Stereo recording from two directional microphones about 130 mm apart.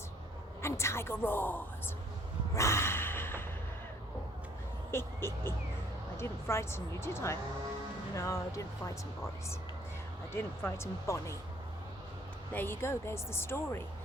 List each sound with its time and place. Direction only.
0.6 s a woman's voice: 20° left (ahead or behind)
2.6 s a sound: 20° left (ahead or behind)
4.9 s a woman's voice: 20° left (ahead or behind)
10.3 s a woman's voice: 20° left (ahead or behind)
12.5 s a woman's voice: 20° left (ahead or behind)